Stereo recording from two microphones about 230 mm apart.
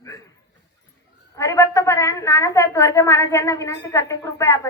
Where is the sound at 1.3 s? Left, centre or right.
Centre.